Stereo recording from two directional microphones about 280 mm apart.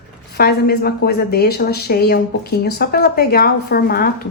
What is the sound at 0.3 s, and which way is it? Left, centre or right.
A woman's voice, left.